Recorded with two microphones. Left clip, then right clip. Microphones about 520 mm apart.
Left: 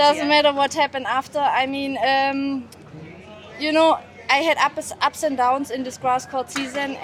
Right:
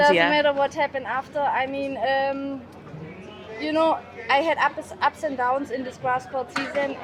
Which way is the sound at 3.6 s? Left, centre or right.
Left.